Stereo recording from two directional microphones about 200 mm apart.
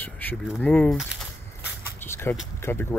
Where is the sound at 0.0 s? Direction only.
10° left (ahead or behind).